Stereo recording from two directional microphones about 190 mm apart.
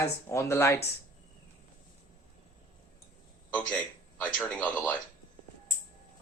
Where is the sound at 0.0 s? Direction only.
15° left (ahead or behind).